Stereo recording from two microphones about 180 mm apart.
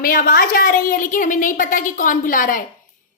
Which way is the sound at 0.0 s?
50° left (ahead or behind).